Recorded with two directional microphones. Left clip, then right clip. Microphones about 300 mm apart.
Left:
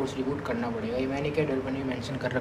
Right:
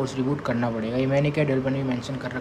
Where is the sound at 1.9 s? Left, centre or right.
Centre.